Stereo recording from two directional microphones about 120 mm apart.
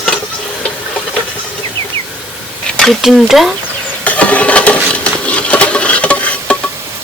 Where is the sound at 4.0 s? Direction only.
10° left (ahead or behind).